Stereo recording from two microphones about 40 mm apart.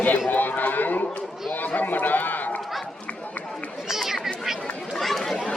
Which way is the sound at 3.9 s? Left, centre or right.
Centre.